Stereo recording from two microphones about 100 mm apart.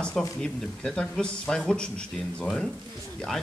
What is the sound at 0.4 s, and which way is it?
Speech, 5° left (ahead or behind).